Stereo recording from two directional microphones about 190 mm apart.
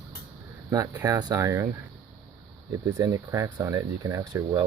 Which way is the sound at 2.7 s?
20° right (ahead or behind).